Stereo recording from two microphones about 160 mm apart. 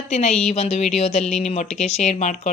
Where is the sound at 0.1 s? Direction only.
45° left (ahead or behind).